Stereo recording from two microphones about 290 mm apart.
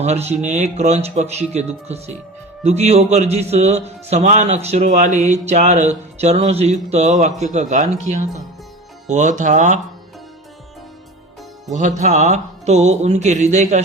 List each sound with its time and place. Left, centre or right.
0.0 s a man's voice: right
11.7 s a man's voice: right